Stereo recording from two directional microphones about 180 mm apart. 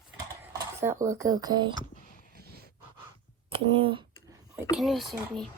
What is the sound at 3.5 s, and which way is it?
Speech, 30° right (ahead or behind).